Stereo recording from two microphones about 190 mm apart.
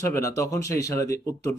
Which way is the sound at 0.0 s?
15° left (ahead or behind).